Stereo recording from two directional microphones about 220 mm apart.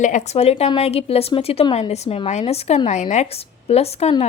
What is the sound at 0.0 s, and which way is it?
A woman's voice, 35° left (ahead or behind).